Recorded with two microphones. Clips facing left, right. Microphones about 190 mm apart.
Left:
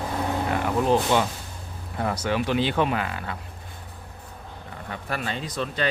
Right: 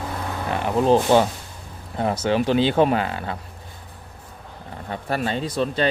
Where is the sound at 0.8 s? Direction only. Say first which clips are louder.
Right 6 dB; 30° right (ahead or behind).